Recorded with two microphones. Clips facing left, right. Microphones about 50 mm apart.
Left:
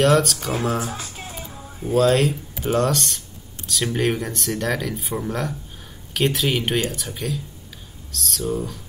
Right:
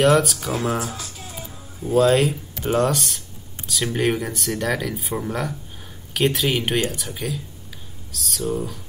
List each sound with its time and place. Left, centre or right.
0.0 s speech: centre
0.9 s music: left
1.4 s a sound: left
2.0 s speech: centre